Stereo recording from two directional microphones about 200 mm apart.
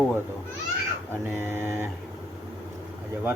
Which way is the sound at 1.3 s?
10° right (ahead or behind).